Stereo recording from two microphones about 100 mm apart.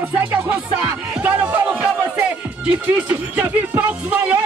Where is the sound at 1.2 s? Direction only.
15° right (ahead or behind).